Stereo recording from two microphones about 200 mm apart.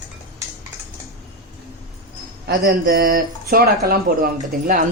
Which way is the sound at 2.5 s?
45° right (ahead or behind).